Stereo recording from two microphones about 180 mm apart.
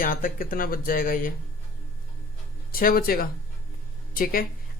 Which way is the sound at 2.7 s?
55° left (ahead or behind).